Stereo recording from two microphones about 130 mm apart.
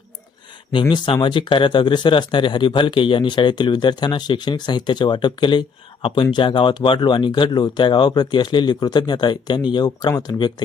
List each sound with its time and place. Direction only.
0.7 s speech: 40° left (ahead or behind)